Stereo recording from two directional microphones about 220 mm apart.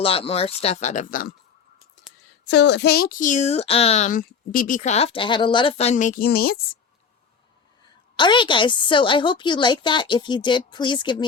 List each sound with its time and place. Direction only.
0.0 s a woman's voice: 25° left (ahead or behind)
2.5 s speech: 50° left (ahead or behind)
8.1 s a woman's voice: 20° left (ahead or behind)